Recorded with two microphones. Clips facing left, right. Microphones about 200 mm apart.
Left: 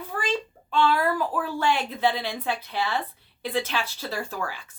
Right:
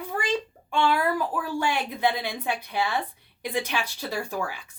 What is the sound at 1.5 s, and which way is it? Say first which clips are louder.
Speech: left 2 dB; 15° right (ahead or behind).